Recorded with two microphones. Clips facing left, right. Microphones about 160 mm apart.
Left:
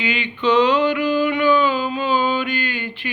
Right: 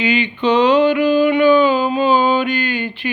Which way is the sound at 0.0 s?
20° right (ahead or behind).